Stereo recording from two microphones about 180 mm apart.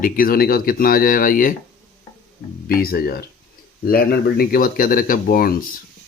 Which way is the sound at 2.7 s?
55° left (ahead or behind).